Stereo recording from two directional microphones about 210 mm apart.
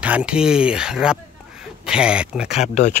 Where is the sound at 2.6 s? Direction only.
35° left (ahead or behind).